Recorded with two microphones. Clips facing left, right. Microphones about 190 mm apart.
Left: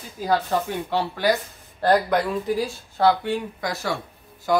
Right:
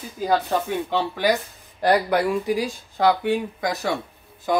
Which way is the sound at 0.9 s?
15° right (ahead or behind).